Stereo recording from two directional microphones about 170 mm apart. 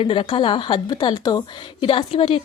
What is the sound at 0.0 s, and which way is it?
A woman's voice, 30° left (ahead or behind).